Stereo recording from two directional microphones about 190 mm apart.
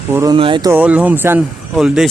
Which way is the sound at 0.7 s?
10° right (ahead or behind).